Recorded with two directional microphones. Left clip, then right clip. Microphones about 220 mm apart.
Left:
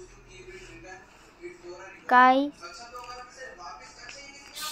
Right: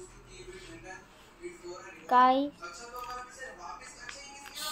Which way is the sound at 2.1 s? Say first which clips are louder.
Left 4 dB; 15° left (ahead or behind).